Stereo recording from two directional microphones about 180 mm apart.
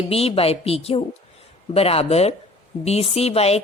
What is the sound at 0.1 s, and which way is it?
Speech, 35° left (ahead or behind).